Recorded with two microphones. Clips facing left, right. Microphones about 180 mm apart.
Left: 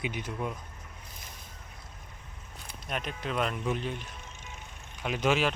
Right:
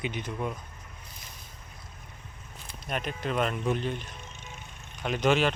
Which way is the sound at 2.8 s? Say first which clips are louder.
Right 3 dB; centre (ahead or behind).